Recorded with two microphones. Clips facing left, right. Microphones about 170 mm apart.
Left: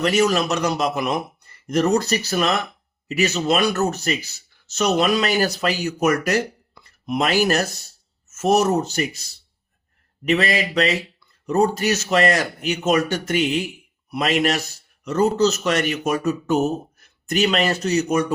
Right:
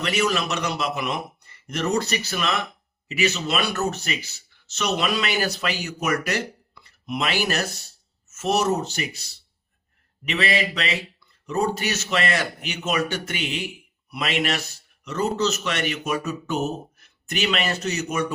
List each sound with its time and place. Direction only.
0.0 s speech: 40° left (ahead or behind)
10.2 s speech: 45° left (ahead or behind)